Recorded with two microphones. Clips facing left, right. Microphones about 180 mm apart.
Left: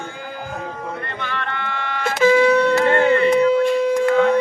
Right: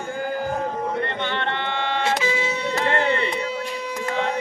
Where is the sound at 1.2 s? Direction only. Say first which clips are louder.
Right 2 dB; 25° right (ahead or behind).